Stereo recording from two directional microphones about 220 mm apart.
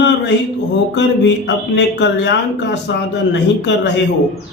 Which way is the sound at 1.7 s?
50° left (ahead or behind).